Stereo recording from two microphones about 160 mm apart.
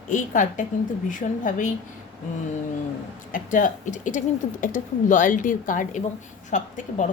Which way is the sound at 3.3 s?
55° left (ahead or behind).